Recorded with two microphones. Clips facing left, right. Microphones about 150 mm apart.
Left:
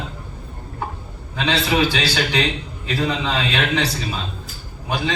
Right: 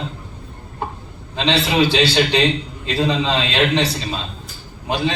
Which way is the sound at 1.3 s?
20° right (ahead or behind).